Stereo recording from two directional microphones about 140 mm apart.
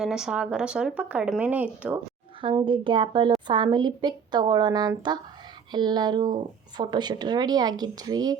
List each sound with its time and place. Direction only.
0.0 s speech: 5° right (ahead or behind)
2.4 s speech: 35° right (ahead or behind)